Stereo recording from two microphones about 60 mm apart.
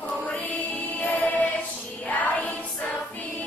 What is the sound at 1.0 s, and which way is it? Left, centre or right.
Music, left.